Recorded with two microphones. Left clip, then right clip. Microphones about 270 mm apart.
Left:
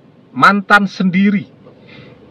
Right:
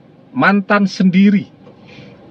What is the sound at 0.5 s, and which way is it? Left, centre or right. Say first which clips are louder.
Speech: left 4 dB; left.